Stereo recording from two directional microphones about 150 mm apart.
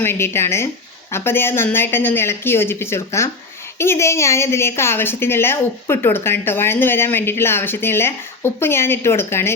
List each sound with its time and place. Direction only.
0.0 s a woman's voice: 15° left (ahead or behind)